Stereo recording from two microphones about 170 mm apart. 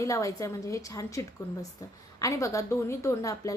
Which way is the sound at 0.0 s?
20° left (ahead or behind).